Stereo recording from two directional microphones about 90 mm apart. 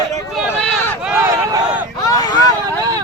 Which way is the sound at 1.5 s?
50° right (ahead or behind).